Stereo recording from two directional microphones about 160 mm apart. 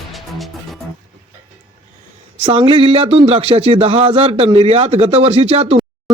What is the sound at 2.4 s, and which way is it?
Speech, 35° right (ahead or behind).